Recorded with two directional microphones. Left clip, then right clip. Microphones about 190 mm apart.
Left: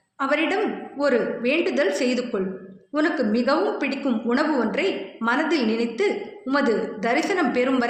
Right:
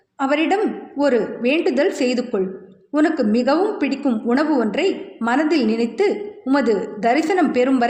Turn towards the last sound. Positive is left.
turn(degrees=-50)  # may be behind; listen again after turning